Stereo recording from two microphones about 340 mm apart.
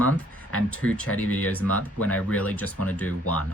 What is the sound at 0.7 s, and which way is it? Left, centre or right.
Speech, centre.